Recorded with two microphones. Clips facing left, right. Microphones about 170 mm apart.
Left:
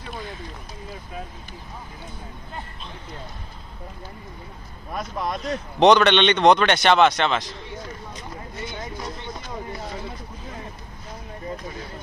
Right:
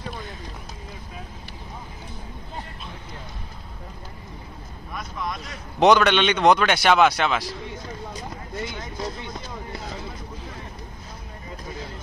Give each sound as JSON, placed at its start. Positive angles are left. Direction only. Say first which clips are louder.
{"t": 4.9, "sound": "vehicle", "louder": "left 4 dB", "side_deg": 35}
{"t": 5.8, "sound": "a man's voice", "louder": "left 1 dB", "side_deg": -5}